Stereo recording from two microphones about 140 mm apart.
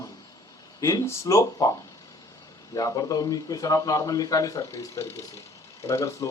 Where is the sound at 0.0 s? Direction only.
25° left (ahead or behind).